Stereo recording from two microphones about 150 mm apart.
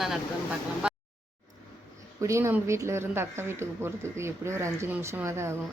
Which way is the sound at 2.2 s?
20° right (ahead or behind).